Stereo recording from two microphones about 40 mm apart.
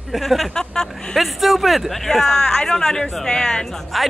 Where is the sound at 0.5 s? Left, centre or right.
Centre.